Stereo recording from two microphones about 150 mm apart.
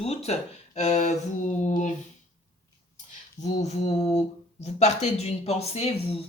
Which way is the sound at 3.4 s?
50° left (ahead or behind).